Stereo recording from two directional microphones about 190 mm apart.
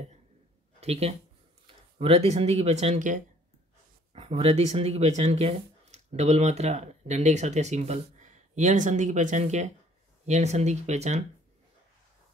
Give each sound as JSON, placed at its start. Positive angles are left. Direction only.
{"t": 0.7, "sound": "speech", "side_deg": -35}